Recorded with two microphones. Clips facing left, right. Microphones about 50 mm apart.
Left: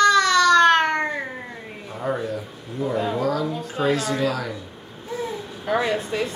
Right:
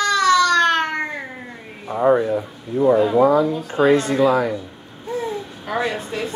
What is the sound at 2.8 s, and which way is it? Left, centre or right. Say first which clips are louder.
Speech: right 10 dB; centre.